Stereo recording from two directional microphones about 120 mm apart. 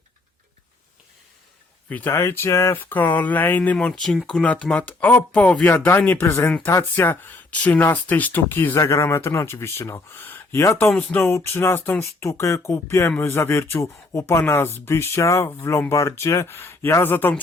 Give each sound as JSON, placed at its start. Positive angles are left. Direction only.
{"t": 1.9, "sound": "speech", "side_deg": 15}
{"t": 10.8, "sound": "speech", "side_deg": 10}